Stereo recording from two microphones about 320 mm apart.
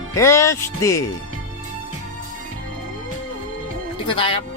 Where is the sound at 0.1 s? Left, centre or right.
Centre.